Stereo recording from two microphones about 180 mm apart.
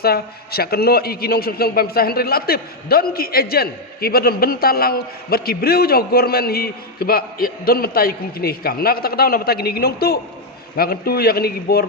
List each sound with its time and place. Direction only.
0.0 s a man's voice: 60° left (ahead or behind)